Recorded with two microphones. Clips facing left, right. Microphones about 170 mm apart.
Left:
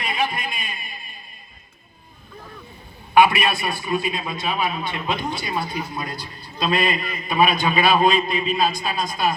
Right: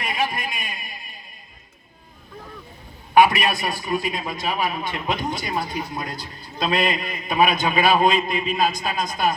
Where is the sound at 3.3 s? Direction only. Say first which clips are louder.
Even; 15° right (ahead or behind).